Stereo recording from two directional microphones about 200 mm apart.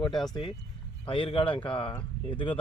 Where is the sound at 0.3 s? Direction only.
25° left (ahead or behind).